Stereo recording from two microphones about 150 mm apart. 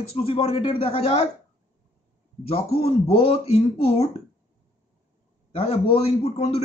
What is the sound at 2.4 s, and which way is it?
A man's voice, 40° left (ahead or behind).